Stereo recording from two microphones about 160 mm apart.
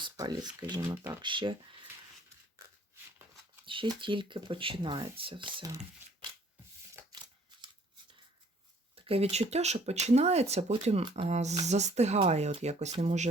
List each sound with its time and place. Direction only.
0.0 s speech: 25° right (ahead or behind)
0.9 s speech: 10° right (ahead or behind)
1.2 s speech: 30° right (ahead or behind)
3.7 s speech: 30° right (ahead or behind)
7.0 s crushing: 15° right (ahead or behind)
9.0 s speech: 40° right (ahead or behind)